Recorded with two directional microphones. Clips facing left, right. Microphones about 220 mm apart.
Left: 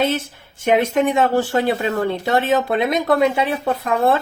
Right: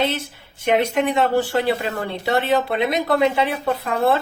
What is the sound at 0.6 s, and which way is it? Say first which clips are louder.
Speech: left 2 dB; 45° left (ahead or behind).